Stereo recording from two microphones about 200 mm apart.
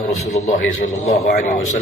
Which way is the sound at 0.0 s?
40° left (ahead or behind).